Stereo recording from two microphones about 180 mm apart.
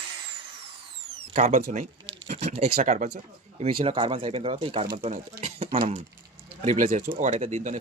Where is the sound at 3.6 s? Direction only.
30° right (ahead or behind).